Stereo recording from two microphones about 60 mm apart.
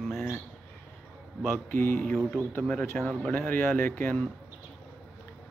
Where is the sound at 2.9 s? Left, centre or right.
Centre.